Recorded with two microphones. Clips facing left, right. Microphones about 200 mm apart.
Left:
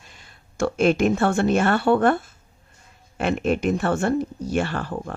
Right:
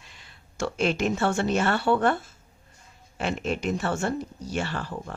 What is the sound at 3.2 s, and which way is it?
Speech, 55° left (ahead or behind).